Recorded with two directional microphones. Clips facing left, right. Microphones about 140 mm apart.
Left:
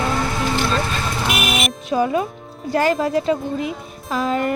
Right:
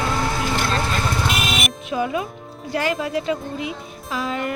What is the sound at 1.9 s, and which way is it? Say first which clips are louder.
Speech: left 5 dB; 35° left (ahead or behind).